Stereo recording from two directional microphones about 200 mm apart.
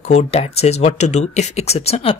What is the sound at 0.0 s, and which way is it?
Speech, 35° left (ahead or behind).